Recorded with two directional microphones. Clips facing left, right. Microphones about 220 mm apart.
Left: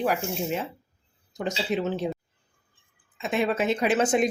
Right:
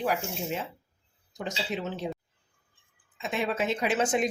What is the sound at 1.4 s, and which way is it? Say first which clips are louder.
Speech: left 6 dB; 55° left (ahead or behind).